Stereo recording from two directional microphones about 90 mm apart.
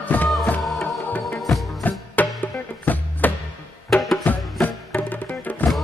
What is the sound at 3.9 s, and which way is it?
Music, centre (ahead or behind).